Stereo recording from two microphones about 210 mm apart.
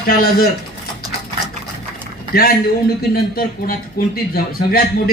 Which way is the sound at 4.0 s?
45° left (ahead or behind).